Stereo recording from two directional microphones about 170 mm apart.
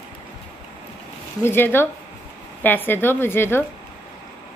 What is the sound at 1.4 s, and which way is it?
Speech, 10° left (ahead or behind).